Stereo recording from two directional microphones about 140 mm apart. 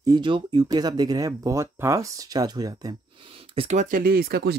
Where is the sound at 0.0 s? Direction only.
30° right (ahead or behind).